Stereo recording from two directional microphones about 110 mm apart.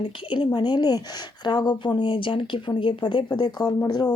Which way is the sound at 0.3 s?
45° left (ahead or behind).